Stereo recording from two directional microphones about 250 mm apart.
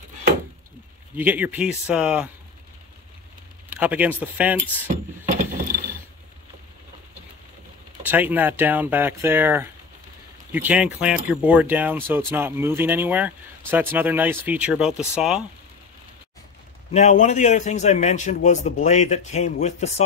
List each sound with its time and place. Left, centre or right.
1.1 s speech: centre
3.7 s speech: centre
4.8 s a sound: right
8.0 s speech: centre
16.9 s a man's voice: left